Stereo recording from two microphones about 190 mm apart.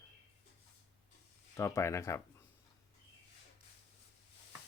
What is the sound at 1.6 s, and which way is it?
Speech, 15° left (ahead or behind).